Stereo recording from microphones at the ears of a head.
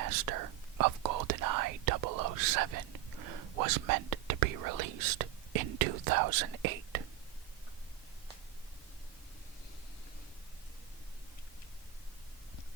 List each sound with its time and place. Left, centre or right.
0.0 s whispering: right